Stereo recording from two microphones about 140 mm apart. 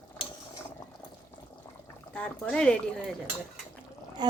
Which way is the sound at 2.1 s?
5° left (ahead or behind).